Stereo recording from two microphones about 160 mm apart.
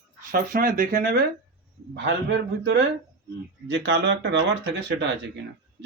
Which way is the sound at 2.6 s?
90° right.